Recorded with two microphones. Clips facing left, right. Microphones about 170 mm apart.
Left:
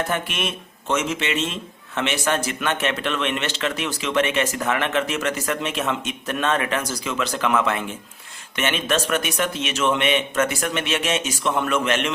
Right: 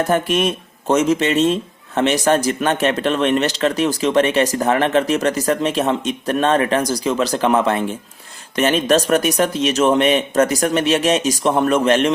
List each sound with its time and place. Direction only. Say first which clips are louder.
0.1 s speech: right 9 dB; 40° right (ahead or behind)